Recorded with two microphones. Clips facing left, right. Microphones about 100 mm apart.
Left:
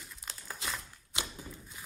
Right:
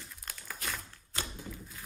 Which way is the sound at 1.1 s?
20° left (ahead or behind).